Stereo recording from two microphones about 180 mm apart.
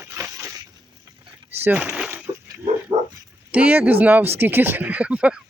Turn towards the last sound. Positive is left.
turn(degrees=-5)  # may be behind; listen again after turning